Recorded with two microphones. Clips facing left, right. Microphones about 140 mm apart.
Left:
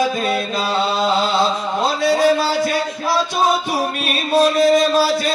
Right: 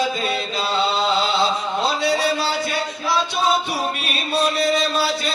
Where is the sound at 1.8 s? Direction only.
50° left (ahead or behind).